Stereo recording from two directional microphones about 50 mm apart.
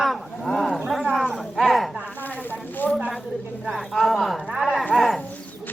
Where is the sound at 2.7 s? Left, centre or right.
Left.